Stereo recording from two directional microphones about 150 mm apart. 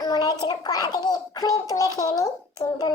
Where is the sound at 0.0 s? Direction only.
25° left (ahead or behind).